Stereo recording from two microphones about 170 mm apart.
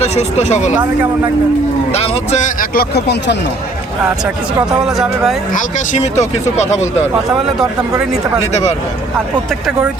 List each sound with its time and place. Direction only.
0.0 s speech: 40° left (ahead or behind)
1.9 s a man's voice: 40° left (ahead or behind); by 3.3 s 75° left (ahead or behind)
4.9 s speech: centre (ahead or behind)
5.5 s a man's voice: 45° left (ahead or behind)